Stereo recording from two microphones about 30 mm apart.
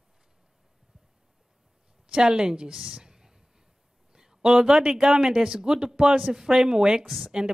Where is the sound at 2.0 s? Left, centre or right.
Right.